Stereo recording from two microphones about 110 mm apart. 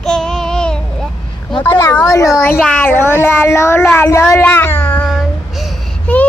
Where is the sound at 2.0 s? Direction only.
30° left (ahead or behind).